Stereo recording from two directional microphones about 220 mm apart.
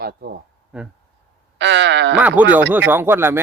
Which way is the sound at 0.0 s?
45° right (ahead or behind).